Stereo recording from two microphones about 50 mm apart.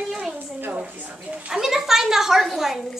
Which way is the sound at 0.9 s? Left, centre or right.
Right.